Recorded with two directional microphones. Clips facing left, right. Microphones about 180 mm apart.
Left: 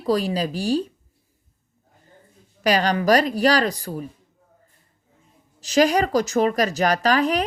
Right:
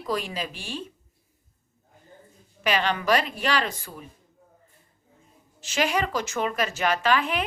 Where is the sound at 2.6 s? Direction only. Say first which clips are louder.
Left 5 dB; 40° left (ahead or behind).